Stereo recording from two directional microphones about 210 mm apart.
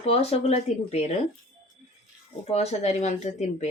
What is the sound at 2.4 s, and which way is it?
Speech, 30° left (ahead or behind).